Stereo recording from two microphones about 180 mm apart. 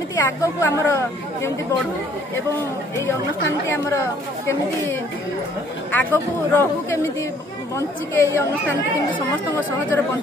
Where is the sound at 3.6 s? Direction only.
15° left (ahead or behind).